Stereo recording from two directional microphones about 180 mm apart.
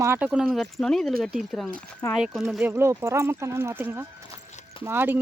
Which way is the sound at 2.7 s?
15° right (ahead or behind).